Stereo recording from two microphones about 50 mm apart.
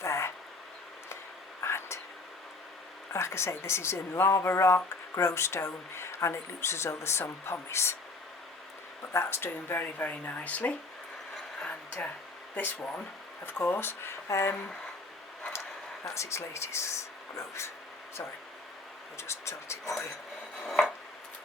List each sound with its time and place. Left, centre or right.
0.0 s a sound: left
1.6 s whispering: left
3.1 s speech: left
9.1 s speech: left
12.5 s speech: left
16.0 s speech: left
19.1 s speech: left